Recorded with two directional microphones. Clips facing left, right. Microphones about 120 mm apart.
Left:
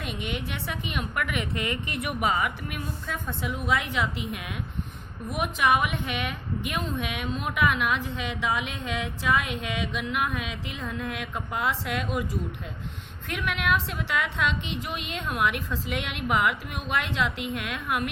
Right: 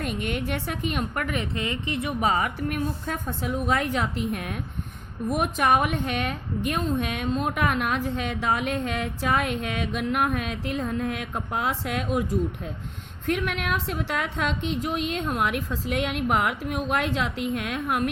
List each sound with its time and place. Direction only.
0.0 s a woman's voice: 45° right (ahead or behind); by 2.3 s 25° right (ahead or behind)
2.3 s a woman's voice: 40° right (ahead or behind)
13.2 s a woman's voice: 45° right (ahead or behind)